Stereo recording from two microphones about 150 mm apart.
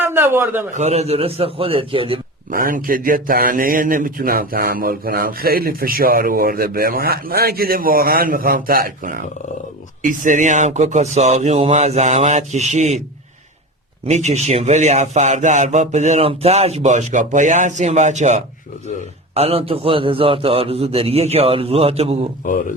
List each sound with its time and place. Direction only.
0.0 s a sound: 15° right (ahead or behind)
0.7 s a man's voice: 45° right (ahead or behind)
2.5 s speech: 70° right (ahead or behind)
10.0 s a man's voice: 60° right (ahead or behind)
14.1 s a man's voice: 50° right (ahead or behind)
19.3 s a man's voice: 40° right (ahead or behind)